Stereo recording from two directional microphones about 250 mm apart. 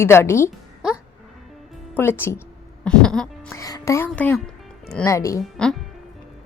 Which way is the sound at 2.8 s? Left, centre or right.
Centre.